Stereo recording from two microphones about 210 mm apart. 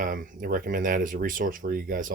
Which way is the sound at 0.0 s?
40° right (ahead or behind).